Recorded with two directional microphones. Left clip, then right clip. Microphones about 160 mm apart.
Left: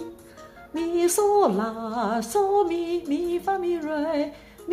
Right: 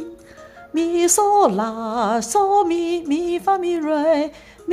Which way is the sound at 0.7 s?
45° right (ahead or behind).